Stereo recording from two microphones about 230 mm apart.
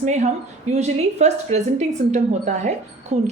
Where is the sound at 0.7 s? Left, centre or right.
Right.